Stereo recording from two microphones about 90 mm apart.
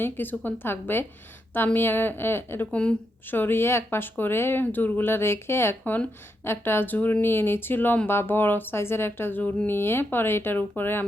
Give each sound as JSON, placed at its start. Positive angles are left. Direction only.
{"t": 0.0, "sound": "speech", "side_deg": 20}